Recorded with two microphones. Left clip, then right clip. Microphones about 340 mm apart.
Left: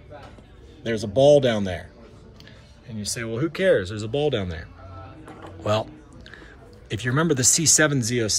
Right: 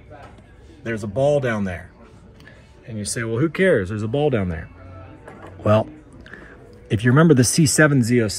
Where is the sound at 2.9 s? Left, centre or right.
Right.